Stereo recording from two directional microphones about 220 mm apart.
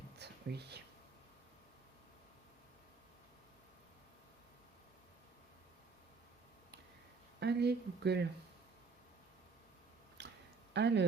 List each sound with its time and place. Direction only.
0.2 s whispering: 50° right (ahead or behind)
7.3 s speech: 50° right (ahead or behind)
10.2 s a sound: 50° right (ahead or behind)
10.8 s speech: 50° right (ahead or behind)